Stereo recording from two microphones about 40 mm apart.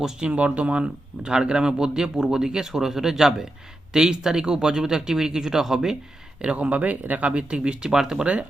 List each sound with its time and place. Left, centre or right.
0.0 s speech: centre
0.3 s speech: right; by 6.0 s centre
6.4 s speech: right; by 8.2 s centre
8.2 s speech: right